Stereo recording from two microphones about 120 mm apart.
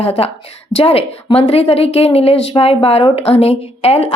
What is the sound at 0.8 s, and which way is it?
A woman's voice, 55° left (ahead or behind).